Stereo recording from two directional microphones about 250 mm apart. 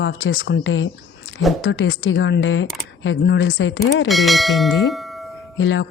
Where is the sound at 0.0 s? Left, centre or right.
Left.